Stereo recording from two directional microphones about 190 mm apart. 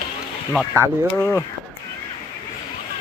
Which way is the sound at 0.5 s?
Centre (ahead or behind).